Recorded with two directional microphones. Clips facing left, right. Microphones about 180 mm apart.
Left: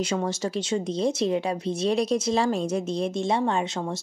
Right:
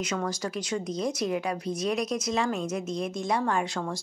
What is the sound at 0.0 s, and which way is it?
Speech, 25° left (ahead or behind).